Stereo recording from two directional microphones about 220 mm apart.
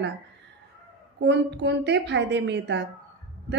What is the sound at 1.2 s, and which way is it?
Speech, 50° right (ahead or behind).